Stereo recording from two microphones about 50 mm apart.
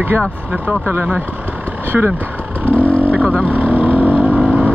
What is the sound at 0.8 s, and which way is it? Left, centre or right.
Speech, right.